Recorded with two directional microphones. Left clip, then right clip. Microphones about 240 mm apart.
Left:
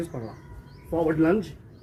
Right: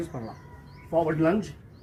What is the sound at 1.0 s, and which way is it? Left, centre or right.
Speech, centre.